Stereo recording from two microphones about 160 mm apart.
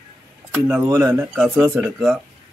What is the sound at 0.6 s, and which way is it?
Speech, 15° right (ahead or behind).